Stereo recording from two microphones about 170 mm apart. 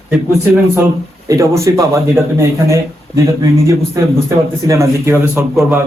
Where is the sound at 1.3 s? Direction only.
20° right (ahead or behind).